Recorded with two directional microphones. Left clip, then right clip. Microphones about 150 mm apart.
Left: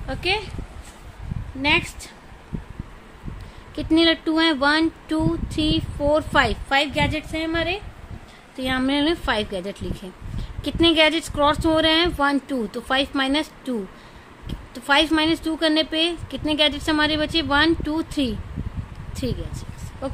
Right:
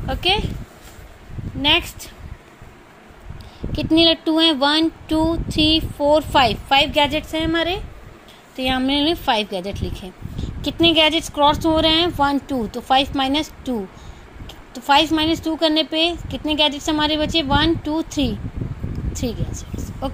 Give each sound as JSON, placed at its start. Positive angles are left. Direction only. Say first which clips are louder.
{"t": 0.0, "sound": "speech", "louder": "right 4 dB", "side_deg": -15}
{"t": 1.6, "sound": "speech", "louder": "right 3 dB", "side_deg": -20}
{"t": 3.7, "sound": "speech", "louder": "right 3 dB", "side_deg": -5}
{"t": 8.5, "sound": "a woman's voice", "louder": "right 3 dB", "side_deg": -5}